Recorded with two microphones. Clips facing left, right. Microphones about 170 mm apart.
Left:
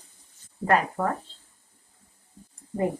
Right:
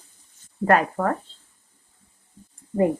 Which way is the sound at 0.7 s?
60° right (ahead or behind).